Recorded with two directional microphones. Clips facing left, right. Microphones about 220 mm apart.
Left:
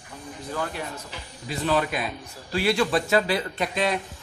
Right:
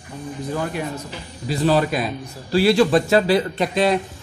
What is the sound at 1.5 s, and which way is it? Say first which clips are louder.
A man's voice: right 6 dB; 35° right (ahead or behind).